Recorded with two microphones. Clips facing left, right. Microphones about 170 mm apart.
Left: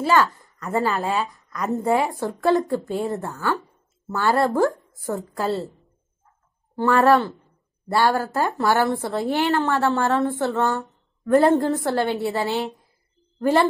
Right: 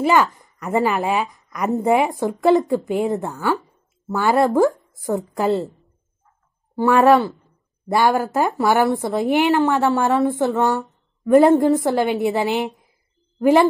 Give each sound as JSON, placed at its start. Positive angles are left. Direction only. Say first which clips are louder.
{"t": 0.0, "sound": "speech", "louder": "right 2 dB", "side_deg": -20}
{"t": 6.7, "sound": "a woman's voice", "louder": "right 3 dB", "side_deg": -10}